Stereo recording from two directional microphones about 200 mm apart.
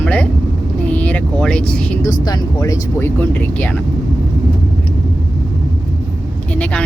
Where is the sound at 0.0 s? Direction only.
5° left (ahead or behind).